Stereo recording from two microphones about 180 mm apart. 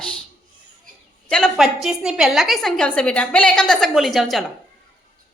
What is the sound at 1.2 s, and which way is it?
A woman's voice, 5° left (ahead or behind).